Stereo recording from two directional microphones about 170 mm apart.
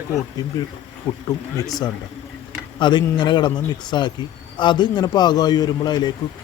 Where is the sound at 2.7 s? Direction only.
30° left (ahead or behind).